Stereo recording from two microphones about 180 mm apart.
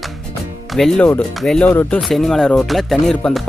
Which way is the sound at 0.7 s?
Centre (ahead or behind).